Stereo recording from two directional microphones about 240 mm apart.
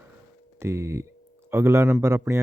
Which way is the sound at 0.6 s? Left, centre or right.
Centre.